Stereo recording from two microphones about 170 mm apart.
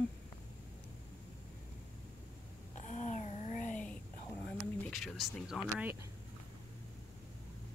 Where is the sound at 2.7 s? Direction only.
45° left (ahead or behind).